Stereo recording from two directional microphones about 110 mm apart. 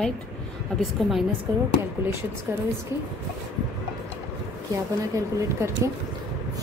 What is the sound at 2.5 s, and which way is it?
Speech, 20° right (ahead or behind).